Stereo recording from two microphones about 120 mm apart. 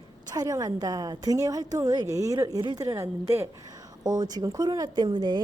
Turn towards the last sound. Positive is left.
turn(degrees=-40)  # may be behind; listen again after turning